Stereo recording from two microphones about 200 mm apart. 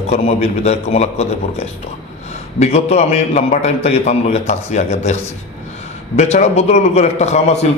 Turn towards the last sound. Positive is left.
turn(degrees=35)  # may be behind; listen again after turning